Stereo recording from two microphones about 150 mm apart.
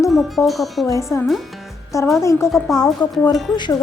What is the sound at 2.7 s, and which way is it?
Speech, centre (ahead or behind).